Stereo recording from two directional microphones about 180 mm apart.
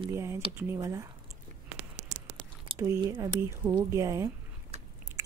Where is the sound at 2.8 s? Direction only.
20° right (ahead or behind).